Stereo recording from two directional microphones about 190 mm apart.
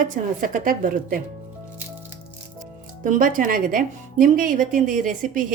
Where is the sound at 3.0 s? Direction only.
45° right (ahead or behind).